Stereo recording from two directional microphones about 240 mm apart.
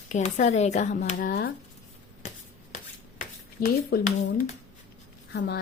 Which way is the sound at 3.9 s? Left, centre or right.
Left.